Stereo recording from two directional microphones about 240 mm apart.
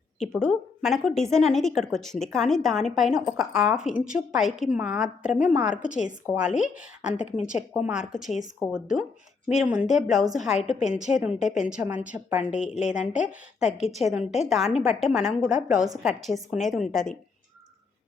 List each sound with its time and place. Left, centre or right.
0.2 s a woman's voice: centre
7.3 s speech: left
7.5 s a woman's voice: centre
14.2 s speech: left
14.5 s a woman's voice: centre